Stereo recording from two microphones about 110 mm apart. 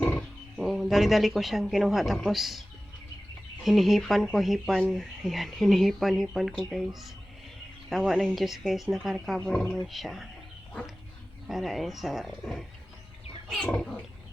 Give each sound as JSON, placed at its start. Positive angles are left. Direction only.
{"t": 0.0, "sound": "roaring cats", "side_deg": 15}
{"t": 0.5, "sound": "speech", "side_deg": -5}
{"t": 11.4, "sound": "speech", "side_deg": 0}
{"t": 13.6, "sound": "roaring cats", "side_deg": 5}